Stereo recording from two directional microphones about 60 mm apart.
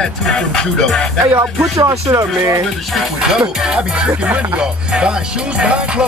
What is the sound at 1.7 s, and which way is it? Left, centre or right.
Speech, right.